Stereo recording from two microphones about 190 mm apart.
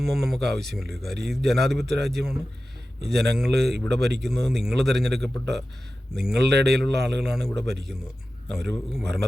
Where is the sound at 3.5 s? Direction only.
60° right (ahead or behind).